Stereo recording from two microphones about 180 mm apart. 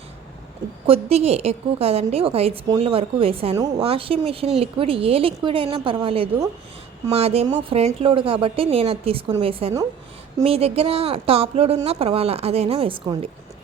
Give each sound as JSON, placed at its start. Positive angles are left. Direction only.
{"t": 0.9, "sound": "speech", "side_deg": -35}